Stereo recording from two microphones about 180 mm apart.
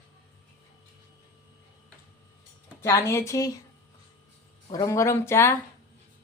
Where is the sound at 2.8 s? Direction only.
15° left (ahead or behind).